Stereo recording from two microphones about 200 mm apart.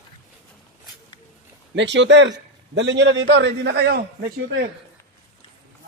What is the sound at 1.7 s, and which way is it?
A man's voice, 65° right (ahead or behind).